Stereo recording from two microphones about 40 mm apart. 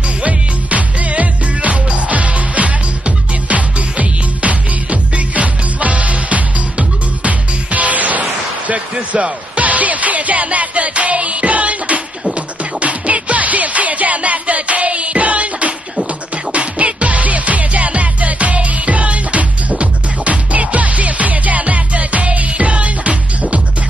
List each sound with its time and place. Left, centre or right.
0.2 s music: right